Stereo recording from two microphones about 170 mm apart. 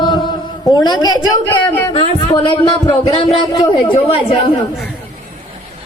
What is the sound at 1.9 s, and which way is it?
Speech, 25° left (ahead or behind).